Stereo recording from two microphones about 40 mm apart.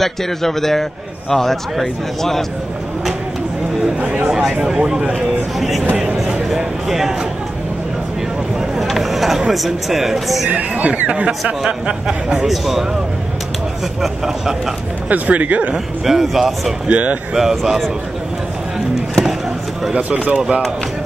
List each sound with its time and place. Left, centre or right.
0.0 s a man's voice: centre
4.3 s chatter: centre
4.6 s speech: centre
5.6 s speech: centre
6.5 s a sound: centre
8.7 s speech: centre
10.5 s a man's voice: right
12.4 s speech: centre
14.0 s speech: centre
15.0 s speech: right
16.1 s speech: centre
16.8 s speech: right
17.4 s speech: centre
19.9 s speech: right